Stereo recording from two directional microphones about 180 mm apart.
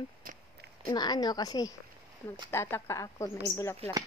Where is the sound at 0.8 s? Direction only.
25° left (ahead or behind).